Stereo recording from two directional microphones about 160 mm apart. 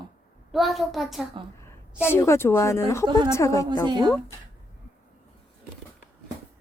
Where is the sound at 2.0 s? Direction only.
15° left (ahead or behind).